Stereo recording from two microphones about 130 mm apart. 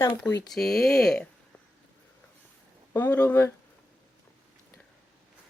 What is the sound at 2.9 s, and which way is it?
Speech, 15° left (ahead or behind).